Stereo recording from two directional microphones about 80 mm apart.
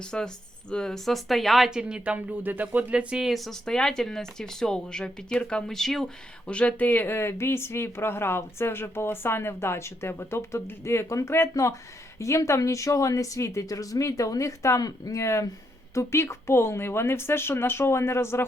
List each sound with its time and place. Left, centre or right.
0.0 s speech: centre
1.8 s speech: centre
6.5 s speech: centre; by 18.4 s left